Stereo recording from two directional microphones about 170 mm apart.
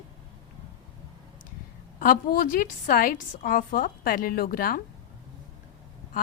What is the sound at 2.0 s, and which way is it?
A woman's voice, 55° left (ahead or behind).